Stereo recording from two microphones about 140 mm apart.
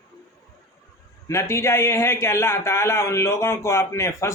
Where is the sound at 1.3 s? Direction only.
20° left (ahead or behind).